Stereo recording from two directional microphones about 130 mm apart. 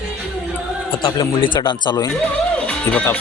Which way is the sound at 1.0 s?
30° left (ahead or behind).